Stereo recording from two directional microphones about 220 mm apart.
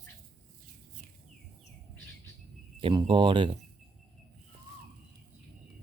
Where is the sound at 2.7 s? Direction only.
25° right (ahead or behind).